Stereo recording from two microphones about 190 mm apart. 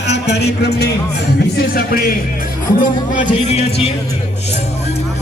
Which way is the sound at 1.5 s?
50° left (ahead or behind).